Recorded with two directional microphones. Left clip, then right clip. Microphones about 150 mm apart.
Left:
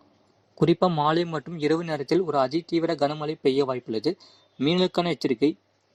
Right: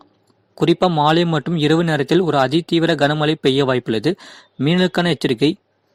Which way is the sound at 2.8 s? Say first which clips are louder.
Right 9 dB; 40° right (ahead or behind).